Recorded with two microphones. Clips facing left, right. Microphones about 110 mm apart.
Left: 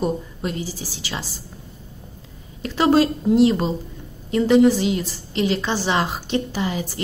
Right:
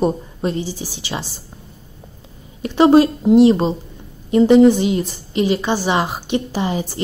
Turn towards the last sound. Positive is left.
turn(degrees=-25)  # may be behind; listen again after turning